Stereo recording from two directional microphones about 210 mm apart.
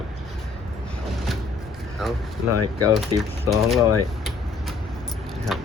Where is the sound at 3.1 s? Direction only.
15° right (ahead or behind).